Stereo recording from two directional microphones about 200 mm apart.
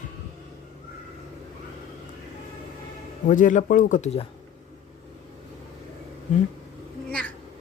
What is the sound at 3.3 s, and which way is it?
Speech, 40° left (ahead or behind).